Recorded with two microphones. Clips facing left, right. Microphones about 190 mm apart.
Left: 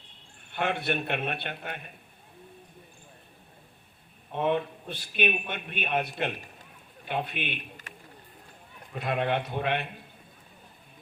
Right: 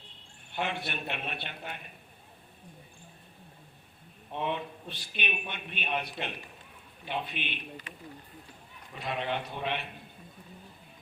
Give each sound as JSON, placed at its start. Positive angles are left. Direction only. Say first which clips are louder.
{"t": 0.6, "sound": "a man's voice", "louder": "left 6 dB", "side_deg": 55}
{"t": 4.4, "sound": "a man's voice", "louder": "left 6 dB", "side_deg": 50}
{"t": 9.0, "sound": "a man's voice", "louder": "left 5 dB", "side_deg": 55}